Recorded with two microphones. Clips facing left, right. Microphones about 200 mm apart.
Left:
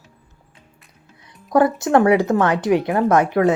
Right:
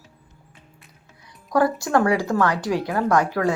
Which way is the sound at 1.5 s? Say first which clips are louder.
Left 4 dB; 20° left (ahead or behind).